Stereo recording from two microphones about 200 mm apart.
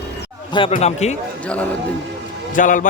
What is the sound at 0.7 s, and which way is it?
Speech, 35° left (ahead or behind).